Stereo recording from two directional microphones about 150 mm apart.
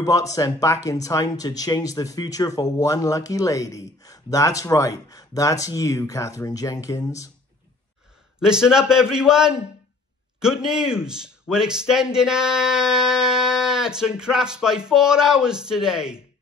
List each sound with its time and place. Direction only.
0.0 s speech: 20° left (ahead or behind)
8.4 s speech: 5° right (ahead or behind)